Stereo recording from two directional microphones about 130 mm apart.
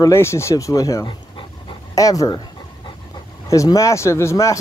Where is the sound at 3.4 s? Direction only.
25° left (ahead or behind).